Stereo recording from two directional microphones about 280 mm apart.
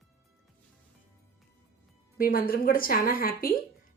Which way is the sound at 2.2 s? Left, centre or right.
Left.